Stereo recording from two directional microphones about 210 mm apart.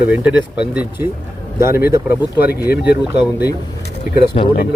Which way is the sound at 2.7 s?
50° left (ahead or behind).